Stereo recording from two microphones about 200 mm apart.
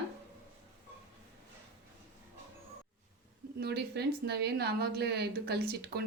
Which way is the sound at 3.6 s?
55° right (ahead or behind).